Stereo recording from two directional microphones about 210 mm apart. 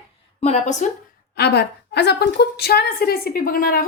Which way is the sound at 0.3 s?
30° left (ahead or behind).